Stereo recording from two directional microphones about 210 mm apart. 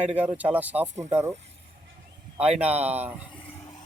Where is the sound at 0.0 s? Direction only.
5° right (ahead or behind).